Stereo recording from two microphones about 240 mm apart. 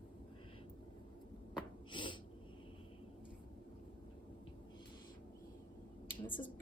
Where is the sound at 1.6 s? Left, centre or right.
Centre.